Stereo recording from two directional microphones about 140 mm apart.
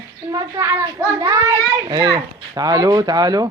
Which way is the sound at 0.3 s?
25° right (ahead or behind).